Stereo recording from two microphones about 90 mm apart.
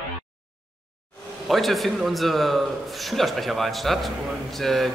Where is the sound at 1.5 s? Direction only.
Centre (ahead or behind).